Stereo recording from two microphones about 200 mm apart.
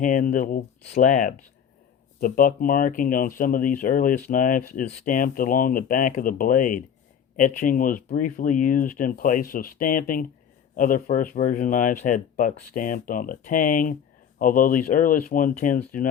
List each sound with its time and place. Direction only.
0.0 s speech: 40° left (ahead or behind)